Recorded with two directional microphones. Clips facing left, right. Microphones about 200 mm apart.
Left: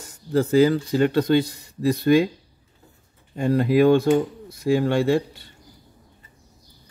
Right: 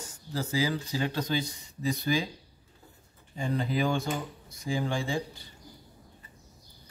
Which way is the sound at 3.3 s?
60° left (ahead or behind).